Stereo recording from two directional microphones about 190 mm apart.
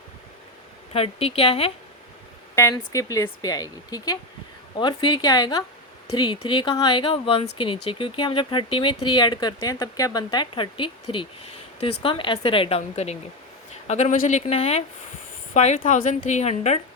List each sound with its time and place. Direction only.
0.9 s a woman's voice: 30° left (ahead or behind)
2.6 s a woman's voice: 15° left (ahead or behind); by 16.8 s 35° left (ahead or behind)